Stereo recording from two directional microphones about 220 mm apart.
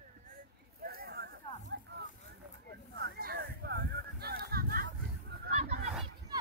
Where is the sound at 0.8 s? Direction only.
45° right (ahead or behind).